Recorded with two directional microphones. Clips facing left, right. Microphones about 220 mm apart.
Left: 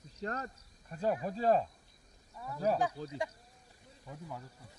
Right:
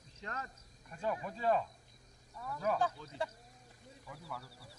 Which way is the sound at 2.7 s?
35° left (ahead or behind).